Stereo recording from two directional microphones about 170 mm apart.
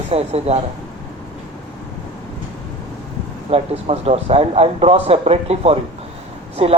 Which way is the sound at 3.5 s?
35° right (ahead or behind).